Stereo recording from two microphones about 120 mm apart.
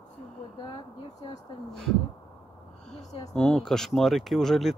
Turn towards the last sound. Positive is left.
turn(degrees=0)  # may be behind; listen again after turning